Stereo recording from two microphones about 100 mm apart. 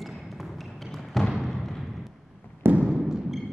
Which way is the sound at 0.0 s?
Centre (ahead or behind).